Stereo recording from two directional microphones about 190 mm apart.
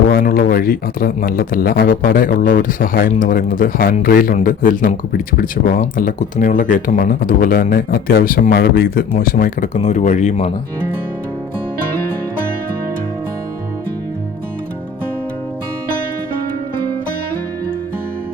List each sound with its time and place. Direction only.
0.1 s speech: 50° left (ahead or behind)